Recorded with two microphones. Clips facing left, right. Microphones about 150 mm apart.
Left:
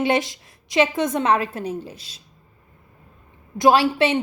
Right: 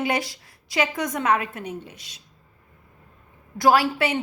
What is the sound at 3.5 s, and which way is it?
Speech, 25° left (ahead or behind).